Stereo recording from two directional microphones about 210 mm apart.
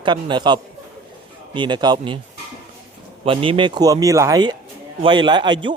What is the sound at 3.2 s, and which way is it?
Speech, 25° right (ahead or behind).